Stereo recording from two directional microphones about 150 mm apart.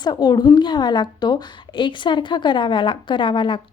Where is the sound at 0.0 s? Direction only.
30° left (ahead or behind).